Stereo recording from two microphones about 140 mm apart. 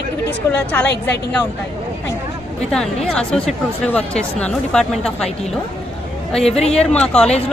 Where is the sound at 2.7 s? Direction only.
5° left (ahead or behind).